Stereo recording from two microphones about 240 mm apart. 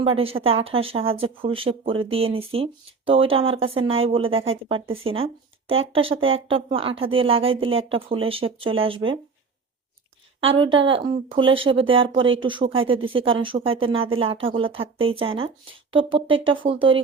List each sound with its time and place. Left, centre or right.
0.0 s speech: right
10.6 s speech: right